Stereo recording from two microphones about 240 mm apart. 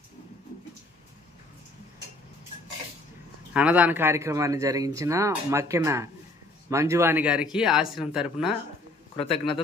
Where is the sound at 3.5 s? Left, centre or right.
Centre.